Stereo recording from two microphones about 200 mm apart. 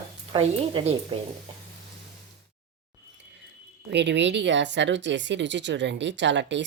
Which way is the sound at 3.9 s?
60° right (ahead or behind).